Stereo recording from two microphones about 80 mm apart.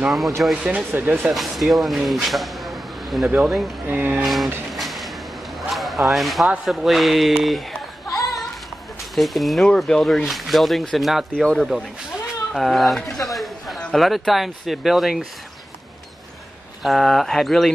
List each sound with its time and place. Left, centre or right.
0.4 s speech: centre
0.7 s speech: centre
1.3 s speech: centre
3.8 s speech: centre
4.2 s speech: centre
4.7 s a sound: centre
6.6 s speech: centre
9.1 s speech: centre
16.8 s speech: centre